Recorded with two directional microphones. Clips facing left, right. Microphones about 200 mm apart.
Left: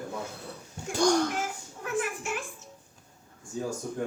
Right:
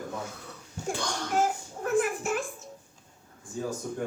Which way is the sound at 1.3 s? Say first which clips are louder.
Right 7 dB; 40° right (ahead or behind).